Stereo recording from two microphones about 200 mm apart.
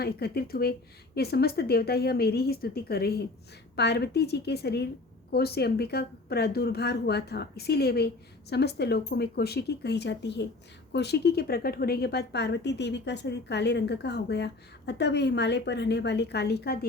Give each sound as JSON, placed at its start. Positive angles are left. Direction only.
{"t": 0.0, "sound": "a woman's voice", "side_deg": 50}